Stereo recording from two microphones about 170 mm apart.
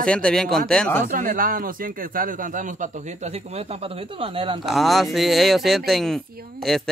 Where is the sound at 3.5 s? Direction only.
35° right (ahead or behind).